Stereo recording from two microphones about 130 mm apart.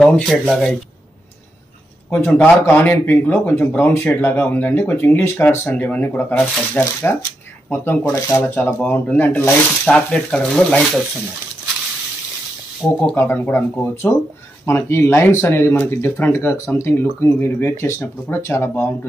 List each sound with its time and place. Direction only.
0.0 s speech: centre (ahead or behind)
2.0 s a man's voice: 15° left (ahead or behind)
13.1 s speech: 20° left (ahead or behind)